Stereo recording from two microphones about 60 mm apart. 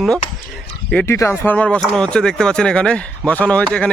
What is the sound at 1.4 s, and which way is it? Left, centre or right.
Speech, left.